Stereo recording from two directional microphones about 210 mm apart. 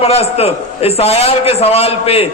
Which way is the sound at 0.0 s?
30° left (ahead or behind).